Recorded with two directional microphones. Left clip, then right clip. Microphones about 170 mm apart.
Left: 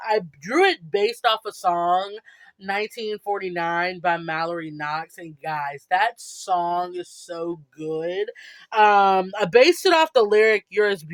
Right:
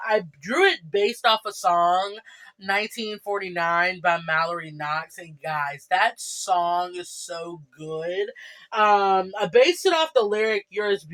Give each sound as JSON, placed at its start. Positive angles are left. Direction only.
{"t": 0.0, "sound": "speech", "side_deg": 35}
{"t": 8.7, "sound": "speech", "side_deg": 45}